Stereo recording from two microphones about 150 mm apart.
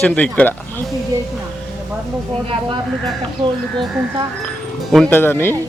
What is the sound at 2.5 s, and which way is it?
Speech, 35° right (ahead or behind).